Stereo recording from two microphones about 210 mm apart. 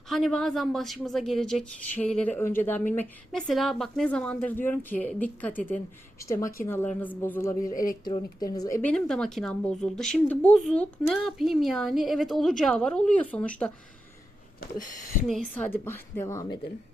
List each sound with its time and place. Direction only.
0.1 s a woman's voice: centre (ahead or behind)
7.6 s speech: 40° left (ahead or behind)
8.4 s speech: 15° left (ahead or behind)
15.3 s a woman's voice: 5° left (ahead or behind)